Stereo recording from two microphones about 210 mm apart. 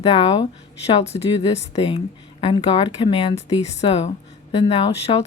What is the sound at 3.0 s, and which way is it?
Speech, 25° left (ahead or behind).